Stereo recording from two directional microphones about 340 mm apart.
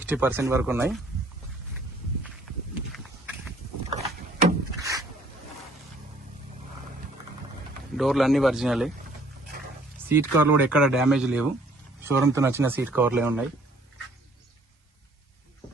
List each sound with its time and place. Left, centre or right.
0.0 s speech: centre
2.3 s a sound: centre
3.8 s vehicle: centre
4.8 s a sound: centre
7.9 s speech: centre
10.1 s speech: centre